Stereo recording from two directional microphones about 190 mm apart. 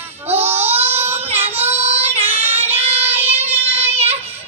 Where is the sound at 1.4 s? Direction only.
10° right (ahead or behind).